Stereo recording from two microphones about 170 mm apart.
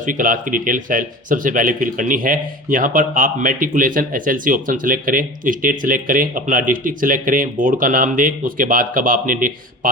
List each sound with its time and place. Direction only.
0.0 s speech: 50° right (ahead or behind)